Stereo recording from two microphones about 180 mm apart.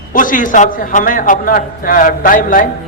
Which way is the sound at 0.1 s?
50° left (ahead or behind).